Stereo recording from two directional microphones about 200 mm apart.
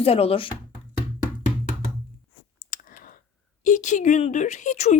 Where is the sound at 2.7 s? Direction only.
45° left (ahead or behind).